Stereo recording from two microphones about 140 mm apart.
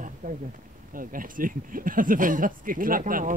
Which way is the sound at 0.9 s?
80° right.